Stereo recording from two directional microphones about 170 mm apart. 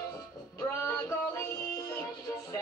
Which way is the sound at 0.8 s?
20° left (ahead or behind).